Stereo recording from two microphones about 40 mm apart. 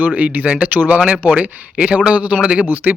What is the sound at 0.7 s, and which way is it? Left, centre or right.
Speech, right.